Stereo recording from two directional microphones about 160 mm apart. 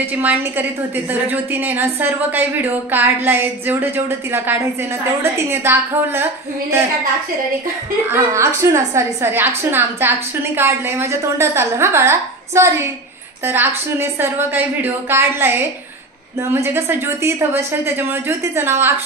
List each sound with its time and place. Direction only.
0.0 s a woman's voice: 10° right (ahead or behind)
8.1 s a woman's voice: 20° right (ahead or behind)